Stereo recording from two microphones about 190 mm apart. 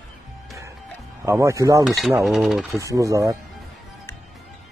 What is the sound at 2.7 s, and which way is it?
Speech, 15° right (ahead or behind).